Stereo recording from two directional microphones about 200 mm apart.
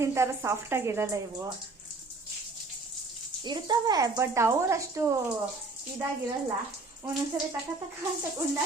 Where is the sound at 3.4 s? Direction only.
20° right (ahead or behind).